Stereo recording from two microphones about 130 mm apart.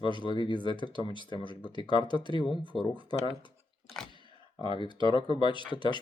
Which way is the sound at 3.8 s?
5° left (ahead or behind).